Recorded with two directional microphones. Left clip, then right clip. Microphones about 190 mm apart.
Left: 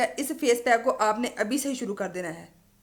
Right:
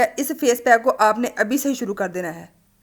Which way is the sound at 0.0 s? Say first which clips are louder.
Right 7 dB; 40° right (ahead or behind).